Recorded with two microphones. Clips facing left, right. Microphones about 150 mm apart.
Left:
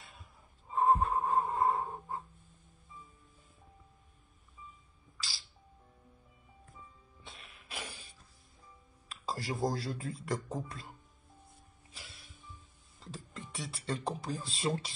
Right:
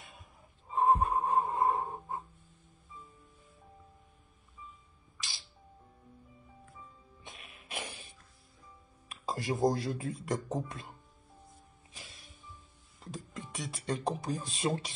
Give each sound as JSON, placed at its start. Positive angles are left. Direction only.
{"t": 0.0, "sound": "wheeze", "side_deg": -20}
{"t": 0.7, "sound": "a sound", "side_deg": -15}
{"t": 5.1, "sound": "music", "side_deg": -20}
{"t": 7.2, "sound": "music", "side_deg": -20}
{"t": 9.1, "sound": "a man's voice", "side_deg": -20}
{"t": 11.9, "sound": "music", "side_deg": -20}
{"t": 13.0, "sound": "speech", "side_deg": -15}